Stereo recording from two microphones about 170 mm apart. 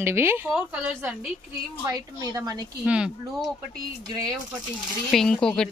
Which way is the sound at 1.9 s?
20° right (ahead or behind).